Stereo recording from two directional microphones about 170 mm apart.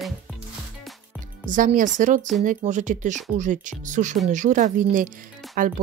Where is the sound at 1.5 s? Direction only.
50° right (ahead or behind).